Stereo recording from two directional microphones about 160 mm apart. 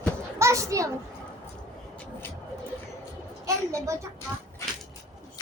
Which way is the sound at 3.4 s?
20° right (ahead or behind).